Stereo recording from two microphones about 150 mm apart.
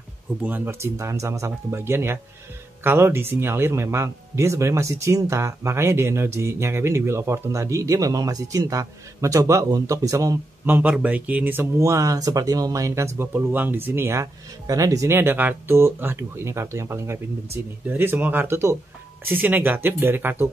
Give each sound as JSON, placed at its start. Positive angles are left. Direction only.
{"t": 0.4, "sound": "speech", "side_deg": -10}